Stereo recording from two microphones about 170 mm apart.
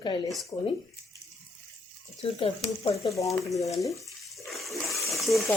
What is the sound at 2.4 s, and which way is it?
Speech, 35° left (ahead or behind).